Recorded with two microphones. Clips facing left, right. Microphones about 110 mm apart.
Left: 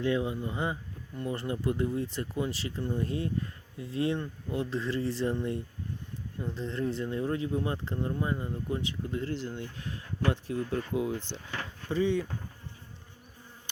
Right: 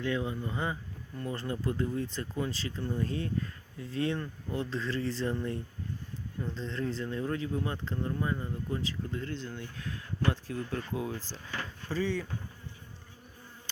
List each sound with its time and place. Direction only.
0.0 s speech: 20° left (ahead or behind)
4.4 s speech: 10° left (ahead or behind)
4.8 s speech: 25° left (ahead or behind)
6.7 s speech: 20° left (ahead or behind)